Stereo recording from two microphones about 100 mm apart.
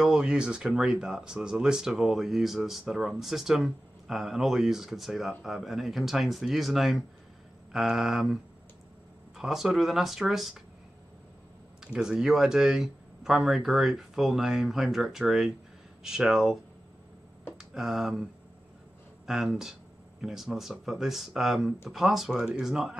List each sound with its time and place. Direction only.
0.0 s speech: 10° right (ahead or behind)
9.4 s speech: 5° right (ahead or behind)
11.8 s speech: 5° right (ahead or behind)
17.6 s speech: 5° right (ahead or behind)
19.2 s speech: 5° right (ahead or behind)